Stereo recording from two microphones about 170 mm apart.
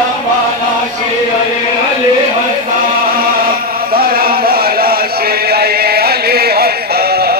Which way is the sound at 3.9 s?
60° right (ahead or behind).